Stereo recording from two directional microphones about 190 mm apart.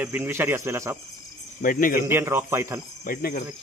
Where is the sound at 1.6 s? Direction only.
45° left (ahead or behind).